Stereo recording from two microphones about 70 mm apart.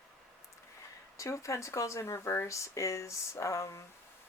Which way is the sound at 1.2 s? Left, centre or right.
Left.